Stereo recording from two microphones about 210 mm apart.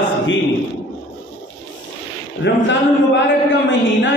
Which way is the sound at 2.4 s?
60° left (ahead or behind).